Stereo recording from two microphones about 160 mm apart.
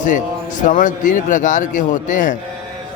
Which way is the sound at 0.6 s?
55° left (ahead or behind).